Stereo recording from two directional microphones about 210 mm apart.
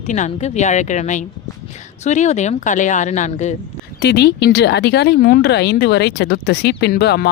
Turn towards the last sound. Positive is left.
turn(degrees=50)  # may be behind; listen again after turning